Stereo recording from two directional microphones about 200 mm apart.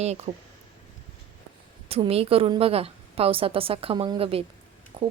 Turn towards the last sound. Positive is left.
turn(degrees=-30)  # may be behind; listen again after turning